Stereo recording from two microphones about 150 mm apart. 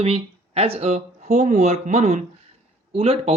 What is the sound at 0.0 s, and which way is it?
Speech, 40° right (ahead or behind).